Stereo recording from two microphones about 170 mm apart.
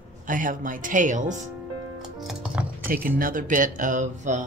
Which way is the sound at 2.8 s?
55° right (ahead or behind).